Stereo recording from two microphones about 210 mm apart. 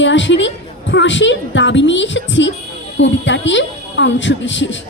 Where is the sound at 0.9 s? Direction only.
60° left (ahead or behind).